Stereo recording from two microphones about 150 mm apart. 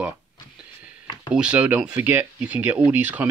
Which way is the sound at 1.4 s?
10° right (ahead or behind).